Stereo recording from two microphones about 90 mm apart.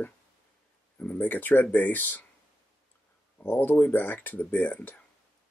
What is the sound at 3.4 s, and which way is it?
Speech, 20° left (ahead or behind).